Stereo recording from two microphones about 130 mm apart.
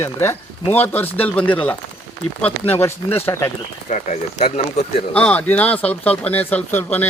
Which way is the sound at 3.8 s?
65° left (ahead or behind).